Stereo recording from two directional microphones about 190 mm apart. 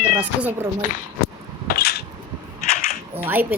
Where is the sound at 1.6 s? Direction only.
55° left (ahead or behind).